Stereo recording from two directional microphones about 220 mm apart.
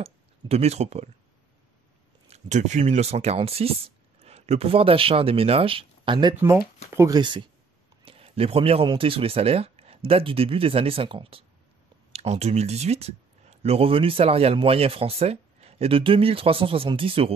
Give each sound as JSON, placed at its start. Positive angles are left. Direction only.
{"t": 0.0, "sound": "speech", "side_deg": -30}
{"t": 2.2, "sound": "speech", "side_deg": -30}